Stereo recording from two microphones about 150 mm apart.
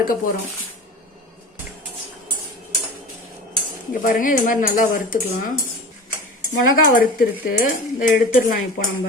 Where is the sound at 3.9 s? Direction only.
60° left (ahead or behind).